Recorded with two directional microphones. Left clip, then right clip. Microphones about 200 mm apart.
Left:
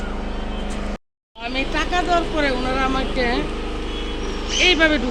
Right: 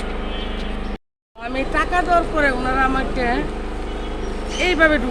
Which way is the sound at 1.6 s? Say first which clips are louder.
Right 2 dB; 10° right (ahead or behind).